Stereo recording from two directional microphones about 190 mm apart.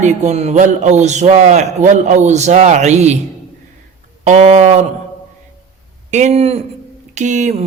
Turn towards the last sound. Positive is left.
turn(degrees=-40)  # may be behind; listen again after turning